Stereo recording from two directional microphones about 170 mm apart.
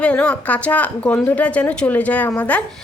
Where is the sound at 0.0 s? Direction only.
5° left (ahead or behind).